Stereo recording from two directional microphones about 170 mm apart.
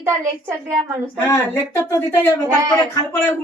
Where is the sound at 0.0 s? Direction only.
15° right (ahead or behind).